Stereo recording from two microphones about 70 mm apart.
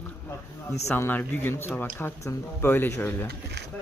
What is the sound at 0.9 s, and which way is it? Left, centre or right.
Speech, left.